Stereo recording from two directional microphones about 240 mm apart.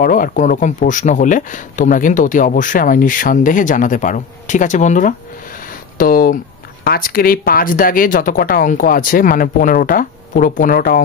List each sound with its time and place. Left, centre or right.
0.0 s speech: left